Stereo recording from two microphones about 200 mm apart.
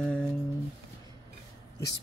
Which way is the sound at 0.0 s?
5° left (ahead or behind).